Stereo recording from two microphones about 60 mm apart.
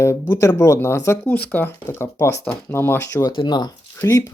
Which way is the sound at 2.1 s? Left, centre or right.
Left.